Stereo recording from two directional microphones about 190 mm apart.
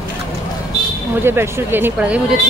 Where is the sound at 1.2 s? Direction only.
10° right (ahead or behind).